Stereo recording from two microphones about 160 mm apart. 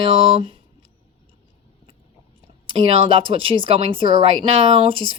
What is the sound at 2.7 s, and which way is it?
Speech, 30° right (ahead or behind).